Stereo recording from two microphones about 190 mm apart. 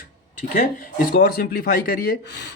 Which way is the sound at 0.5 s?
50° left (ahead or behind).